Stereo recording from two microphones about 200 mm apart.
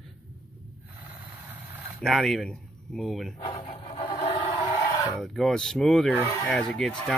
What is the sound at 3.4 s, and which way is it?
Wood, 25° left (ahead or behind).